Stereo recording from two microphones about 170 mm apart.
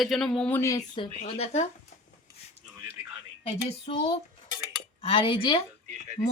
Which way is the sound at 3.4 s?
35° left (ahead or behind).